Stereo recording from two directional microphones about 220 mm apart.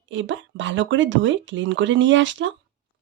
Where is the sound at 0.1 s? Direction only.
55° right (ahead or behind).